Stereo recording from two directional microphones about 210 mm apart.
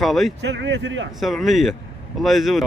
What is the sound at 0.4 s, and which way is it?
Speech, 55° right (ahead or behind).